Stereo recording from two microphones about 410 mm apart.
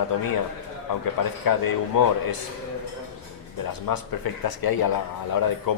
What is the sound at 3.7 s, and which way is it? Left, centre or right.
Speech, left.